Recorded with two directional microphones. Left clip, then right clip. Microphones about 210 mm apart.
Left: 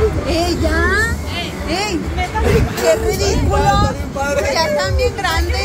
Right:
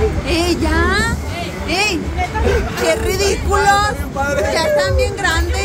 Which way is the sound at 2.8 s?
25° right (ahead or behind).